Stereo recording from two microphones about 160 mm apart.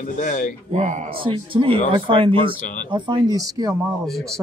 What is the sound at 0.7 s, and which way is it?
Speech, 45° right (ahead or behind).